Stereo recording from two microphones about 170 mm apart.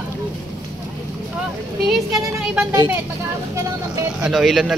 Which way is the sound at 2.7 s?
15° right (ahead or behind).